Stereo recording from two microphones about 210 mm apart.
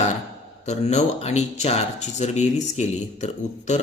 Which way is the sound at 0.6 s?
30° left (ahead or behind).